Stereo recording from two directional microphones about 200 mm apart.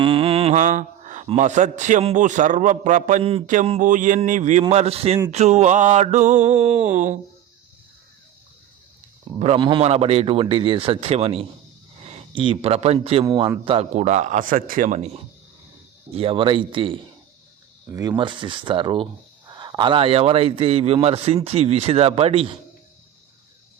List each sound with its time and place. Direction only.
0.0 s mantra: 25° right (ahead or behind)
1.3 s a man's voice: 35° right (ahead or behind)
9.4 s a man's voice: 25° right (ahead or behind)
16.1 s a man's voice: 25° right (ahead or behind)
17.8 s a man's voice: 15° right (ahead or behind)